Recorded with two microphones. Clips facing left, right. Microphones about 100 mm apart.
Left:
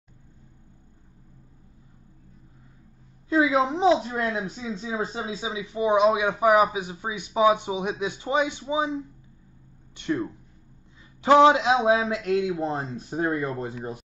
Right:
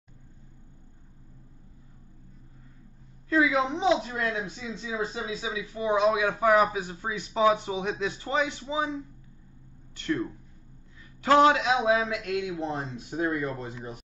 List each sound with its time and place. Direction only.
3.3 s a woman's voice: 25° left (ahead or behind); by 13.9 s 40° left (ahead or behind)